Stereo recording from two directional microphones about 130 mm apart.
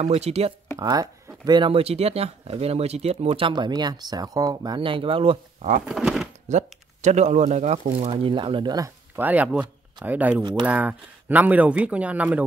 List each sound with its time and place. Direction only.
0.0 s speech: 55° right (ahead or behind)
0.7 s speech: 30° right (ahead or behind)
4.7 s speech: 40° right (ahead or behind)
5.9 s speech: 5° right (ahead or behind)
6.5 s speech: 60° right (ahead or behind); by 8.9 s 30° right (ahead or behind)
9.1 s speech: 15° right (ahead or behind)